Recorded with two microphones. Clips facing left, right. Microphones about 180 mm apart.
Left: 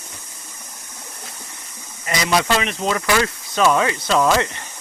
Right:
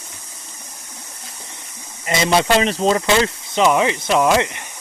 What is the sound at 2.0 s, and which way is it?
Speech, 25° right (ahead or behind).